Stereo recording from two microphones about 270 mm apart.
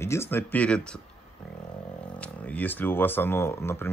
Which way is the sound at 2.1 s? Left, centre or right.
Centre.